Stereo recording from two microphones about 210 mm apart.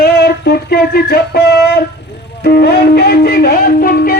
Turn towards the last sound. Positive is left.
turn(degrees=45)  # may be behind; listen again after turning